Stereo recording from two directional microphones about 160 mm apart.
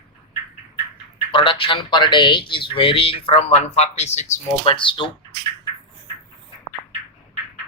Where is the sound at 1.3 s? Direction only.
30° left (ahead or behind).